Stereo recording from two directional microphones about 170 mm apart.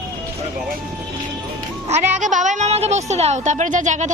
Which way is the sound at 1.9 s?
45° right (ahead or behind).